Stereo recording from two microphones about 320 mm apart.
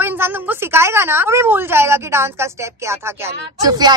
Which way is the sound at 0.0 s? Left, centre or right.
Centre.